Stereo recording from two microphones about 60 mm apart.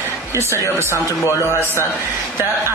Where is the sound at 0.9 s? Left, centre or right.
Left.